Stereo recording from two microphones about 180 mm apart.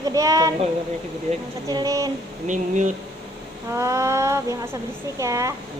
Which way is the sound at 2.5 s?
45° right (ahead or behind).